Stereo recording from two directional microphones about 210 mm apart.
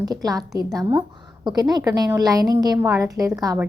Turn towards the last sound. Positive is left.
turn(degrees=-15)  # may be behind; listen again after turning